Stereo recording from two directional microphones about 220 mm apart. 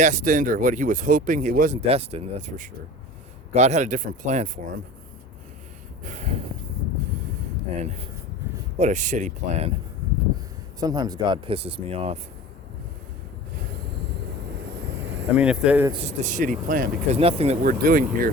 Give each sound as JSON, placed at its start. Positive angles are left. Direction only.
{"t": 0.0, "sound": "speech", "side_deg": -35}
{"t": 6.1, "sound": "speech", "side_deg": -30}
{"t": 7.8, "sound": "speech", "side_deg": -30}
{"t": 10.8, "sound": "speech", "side_deg": -15}
{"t": 15.3, "sound": "speech", "side_deg": -5}
{"t": 15.9, "sound": "speech", "side_deg": -30}
{"t": 17.2, "sound": "speech", "side_deg": -25}